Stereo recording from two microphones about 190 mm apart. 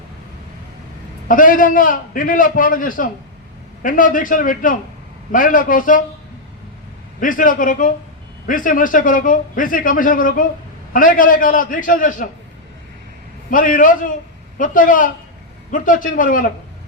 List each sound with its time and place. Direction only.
1.3 s a man's voice: 45° left (ahead or behind)
7.2 s a man's voice: 45° left (ahead or behind)
13.5 s a man's voice: 45° left (ahead or behind)